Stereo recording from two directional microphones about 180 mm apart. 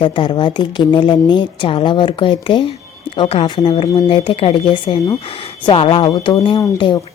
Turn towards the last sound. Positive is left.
turn(degrees=20)  # may be behind; listen again after turning